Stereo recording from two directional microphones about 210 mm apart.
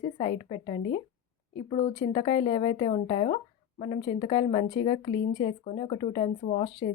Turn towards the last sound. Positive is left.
turn(degrees=30)  # may be behind; listen again after turning